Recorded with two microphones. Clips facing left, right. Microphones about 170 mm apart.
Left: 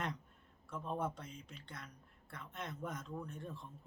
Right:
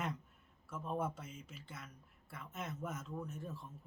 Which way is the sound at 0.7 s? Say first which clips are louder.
Even; 5° right (ahead or behind).